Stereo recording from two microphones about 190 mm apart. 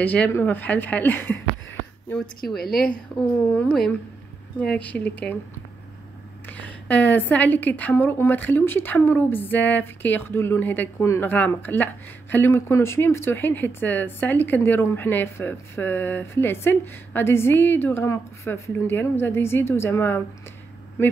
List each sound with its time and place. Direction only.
0.0 s a woman's voice: 10° left (ahead or behind)
2.6 s a woman's voice: 50° left (ahead or behind)
3.5 s a woman's voice: 5° left (ahead or behind)
6.4 s a woman's voice: 10° left (ahead or behind)